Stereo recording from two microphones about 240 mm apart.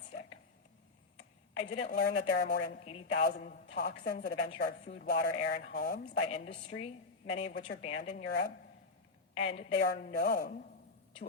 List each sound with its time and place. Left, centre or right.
1.7 s speech: left
2.8 s speech: left
3.2 s speech: left
6.2 s speech: left
8.3 s speech: left
9.3 s a woman's voice: left
9.7 s speech: left